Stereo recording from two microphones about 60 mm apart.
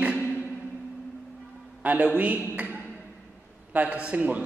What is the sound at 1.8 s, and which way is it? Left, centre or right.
Speech, right.